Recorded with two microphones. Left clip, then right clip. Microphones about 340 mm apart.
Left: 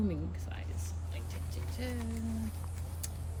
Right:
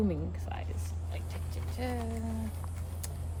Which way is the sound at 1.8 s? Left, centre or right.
Centre.